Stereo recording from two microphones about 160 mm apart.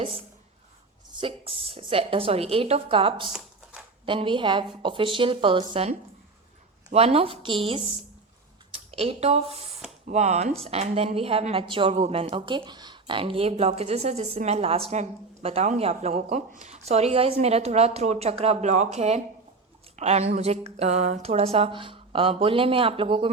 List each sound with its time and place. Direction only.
1.1 s a woman's voice: 35° right (ahead or behind)
3.3 s shuffling cards: 5° right (ahead or behind)
4.0 s a woman's voice: 30° right (ahead or behind)